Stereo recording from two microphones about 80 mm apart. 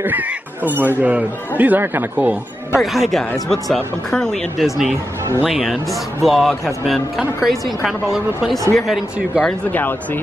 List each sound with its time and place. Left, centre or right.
0.0 s speech: right
2.8 s speech: centre
9.7 s speech: left